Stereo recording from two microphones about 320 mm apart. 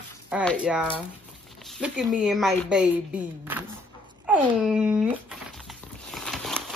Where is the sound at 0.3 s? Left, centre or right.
Centre.